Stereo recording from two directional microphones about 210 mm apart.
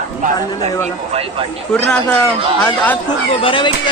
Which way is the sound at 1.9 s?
5° left (ahead or behind).